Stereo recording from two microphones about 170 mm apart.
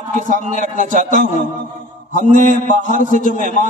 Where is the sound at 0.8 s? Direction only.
50° right (ahead or behind).